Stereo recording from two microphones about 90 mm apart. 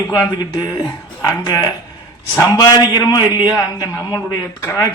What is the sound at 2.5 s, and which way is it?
A man's voice, 50° left (ahead or behind).